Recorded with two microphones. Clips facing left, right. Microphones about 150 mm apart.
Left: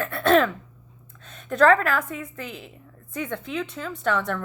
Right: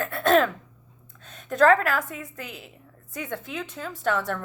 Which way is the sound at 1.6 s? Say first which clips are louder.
Left 1 dB; 45° right (ahead or behind).